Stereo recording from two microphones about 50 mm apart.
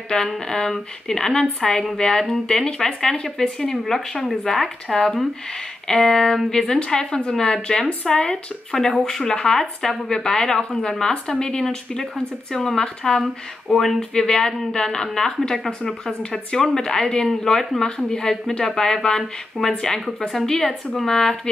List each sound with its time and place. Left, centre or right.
0.1 s speech: centre